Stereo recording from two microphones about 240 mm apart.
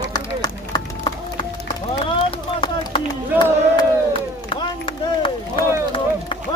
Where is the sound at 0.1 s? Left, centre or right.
Centre.